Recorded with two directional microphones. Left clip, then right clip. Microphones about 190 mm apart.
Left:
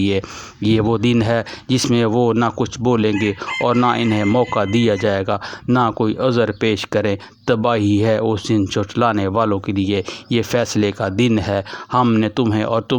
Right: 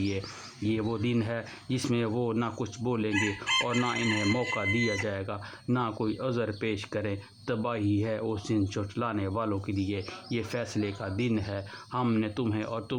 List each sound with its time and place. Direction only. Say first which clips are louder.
0.6 s speech: left 14 dB; 45° left (ahead or behind)